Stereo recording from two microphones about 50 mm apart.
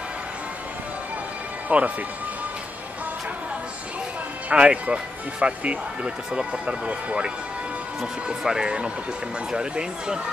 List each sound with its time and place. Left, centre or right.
1.7 s speech: right
4.5 s speech: right